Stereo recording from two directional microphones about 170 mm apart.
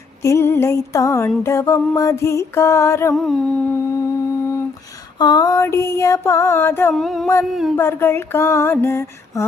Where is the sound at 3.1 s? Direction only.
Centre (ahead or behind).